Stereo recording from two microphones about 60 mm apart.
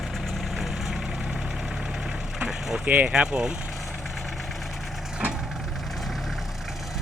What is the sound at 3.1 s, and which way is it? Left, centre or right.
Speech, centre.